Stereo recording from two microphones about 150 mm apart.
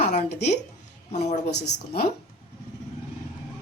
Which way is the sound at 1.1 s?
45° left (ahead or behind).